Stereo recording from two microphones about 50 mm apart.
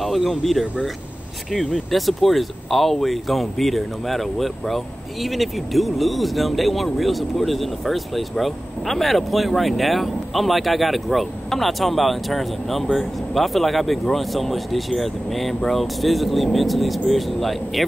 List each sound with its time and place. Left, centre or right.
0.0 s speech: centre